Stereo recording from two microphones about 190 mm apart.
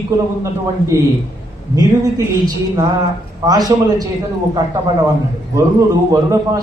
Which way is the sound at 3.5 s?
20° right (ahead or behind).